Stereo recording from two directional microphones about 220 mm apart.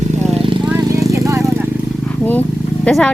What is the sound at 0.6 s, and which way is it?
Vehicle, 10° right (ahead or behind).